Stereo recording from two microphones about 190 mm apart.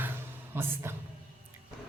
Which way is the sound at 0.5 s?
10° right (ahead or behind).